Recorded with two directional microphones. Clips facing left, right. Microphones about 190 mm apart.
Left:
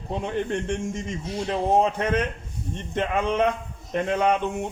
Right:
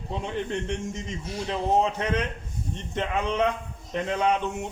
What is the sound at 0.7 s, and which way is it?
A man's voice, 50° left (ahead or behind).